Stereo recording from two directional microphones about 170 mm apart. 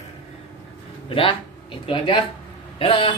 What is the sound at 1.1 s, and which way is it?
A man's voice, 30° left (ahead or behind).